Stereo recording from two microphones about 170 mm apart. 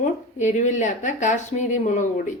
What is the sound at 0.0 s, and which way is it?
Speech, 45° left (ahead or behind).